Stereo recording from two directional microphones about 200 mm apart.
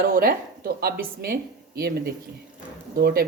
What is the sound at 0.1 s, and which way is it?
Speech, 45° right (ahead or behind).